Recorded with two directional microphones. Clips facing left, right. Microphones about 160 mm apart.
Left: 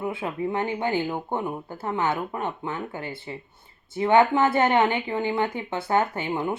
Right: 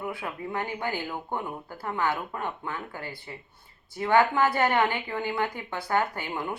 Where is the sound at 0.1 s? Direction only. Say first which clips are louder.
Left 6 dB; 25° left (ahead or behind).